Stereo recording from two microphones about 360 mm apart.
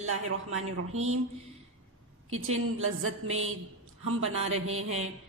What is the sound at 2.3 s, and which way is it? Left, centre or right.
Speech, right.